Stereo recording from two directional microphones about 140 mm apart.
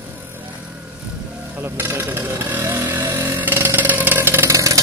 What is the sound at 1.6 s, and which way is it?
Vehicle, 15° right (ahead or behind).